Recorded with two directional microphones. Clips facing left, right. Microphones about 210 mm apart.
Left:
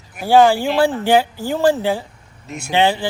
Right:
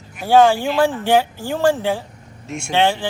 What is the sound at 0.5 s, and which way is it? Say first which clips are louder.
Speech: left 1 dB; 35° left (ahead or behind).